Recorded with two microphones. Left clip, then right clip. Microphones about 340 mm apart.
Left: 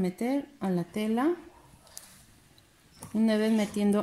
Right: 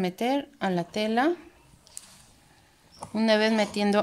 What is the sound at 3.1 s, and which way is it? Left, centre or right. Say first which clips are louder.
Speech: right 5 dB; right.